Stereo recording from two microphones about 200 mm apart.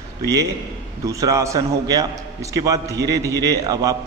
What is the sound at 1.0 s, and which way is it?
A man's voice, 15° right (ahead or behind).